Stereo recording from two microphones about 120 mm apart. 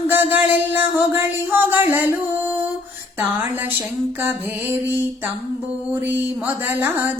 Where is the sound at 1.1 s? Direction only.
20° right (ahead or behind).